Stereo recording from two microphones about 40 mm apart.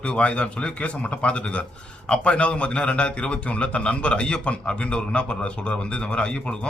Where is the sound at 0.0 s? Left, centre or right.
Left.